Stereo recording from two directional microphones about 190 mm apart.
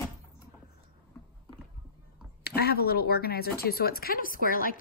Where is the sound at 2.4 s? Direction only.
55° left (ahead or behind).